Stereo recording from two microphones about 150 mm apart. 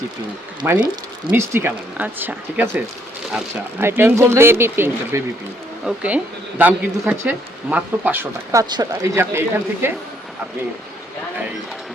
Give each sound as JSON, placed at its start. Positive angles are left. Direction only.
{"t": 0.6, "sound": "speech", "side_deg": -10}
{"t": 8.7, "sound": "speech", "side_deg": -25}